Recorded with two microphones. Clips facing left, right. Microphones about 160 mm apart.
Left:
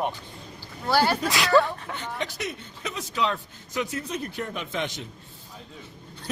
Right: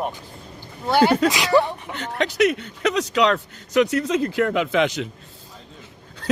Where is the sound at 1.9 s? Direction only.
80° right.